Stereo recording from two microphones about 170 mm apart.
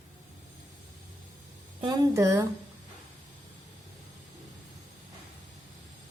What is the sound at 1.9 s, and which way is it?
Speech, 20° right (ahead or behind).